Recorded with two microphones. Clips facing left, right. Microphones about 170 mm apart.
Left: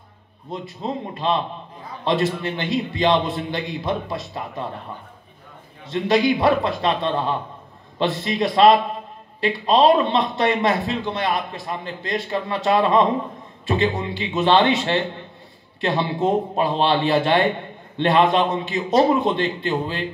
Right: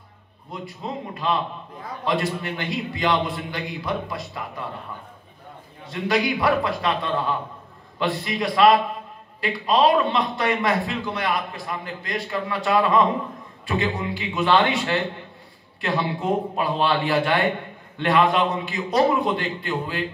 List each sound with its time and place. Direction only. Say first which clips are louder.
0.5 s a man's voice: left 4 dB; 25° left (ahead or behind)
5.9 s a man's voice: left 5 dB; 25° left (ahead or behind)